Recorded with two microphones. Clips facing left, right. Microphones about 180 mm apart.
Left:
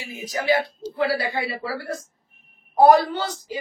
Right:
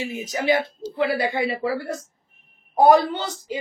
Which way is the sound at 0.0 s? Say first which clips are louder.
Right 3 dB; 20° right (ahead or behind).